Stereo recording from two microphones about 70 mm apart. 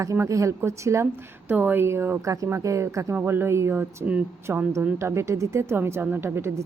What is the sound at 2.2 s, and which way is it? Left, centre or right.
A woman's voice, right.